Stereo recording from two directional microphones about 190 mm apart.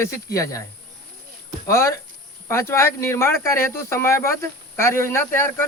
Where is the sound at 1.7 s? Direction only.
15° left (ahead or behind).